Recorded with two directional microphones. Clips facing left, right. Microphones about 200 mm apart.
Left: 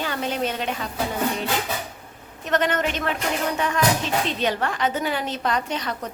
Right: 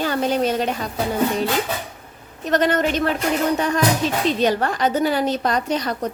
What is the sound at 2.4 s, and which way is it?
A woman's voice, 35° right (ahead or behind).